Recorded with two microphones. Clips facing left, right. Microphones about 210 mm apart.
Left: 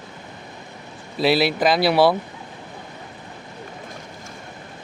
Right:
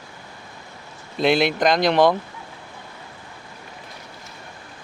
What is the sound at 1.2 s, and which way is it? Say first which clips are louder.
Speech: even; 5° left (ahead or behind).